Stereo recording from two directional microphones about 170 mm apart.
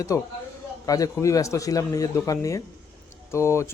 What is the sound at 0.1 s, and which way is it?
Speech, 20° left (ahead or behind).